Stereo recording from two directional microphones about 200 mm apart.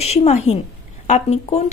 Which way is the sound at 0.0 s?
30° left (ahead or behind).